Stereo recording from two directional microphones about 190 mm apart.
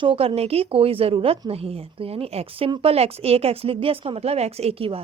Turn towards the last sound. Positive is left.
turn(degrees=-30)  # may be behind; listen again after turning